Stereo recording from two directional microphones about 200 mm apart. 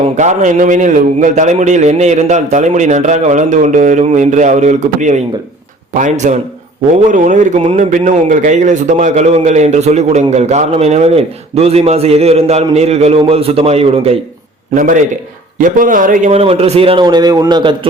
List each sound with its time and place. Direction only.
0.2 s a man's voice: 35° right (ahead or behind)
14.8 s a man's voice: 40° right (ahead or behind); by 17.7 s 25° right (ahead or behind)